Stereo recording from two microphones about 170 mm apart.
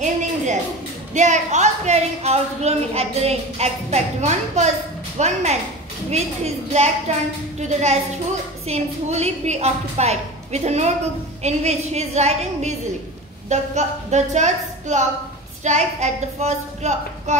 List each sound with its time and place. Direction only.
1.1 s a child's voice: 45° right (ahead or behind)